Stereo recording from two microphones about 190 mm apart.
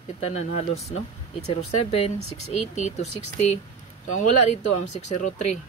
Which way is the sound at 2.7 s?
35° left (ahead or behind).